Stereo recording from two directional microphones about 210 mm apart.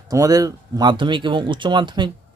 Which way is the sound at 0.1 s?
15° right (ahead or behind).